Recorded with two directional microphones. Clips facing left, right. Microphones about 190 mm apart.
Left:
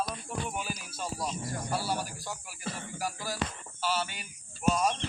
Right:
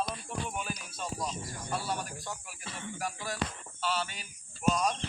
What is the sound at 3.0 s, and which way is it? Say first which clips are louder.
Speech: left 1 dB; centre (ahead or behind).